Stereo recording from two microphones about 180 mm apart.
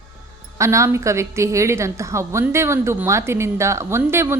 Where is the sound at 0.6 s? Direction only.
15° right (ahead or behind).